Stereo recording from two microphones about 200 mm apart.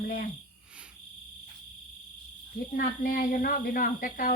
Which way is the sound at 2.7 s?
45° left (ahead or behind).